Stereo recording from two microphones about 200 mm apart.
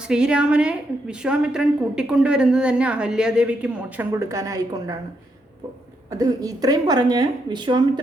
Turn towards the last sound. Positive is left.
turn(degrees=-20)  # may be behind; listen again after turning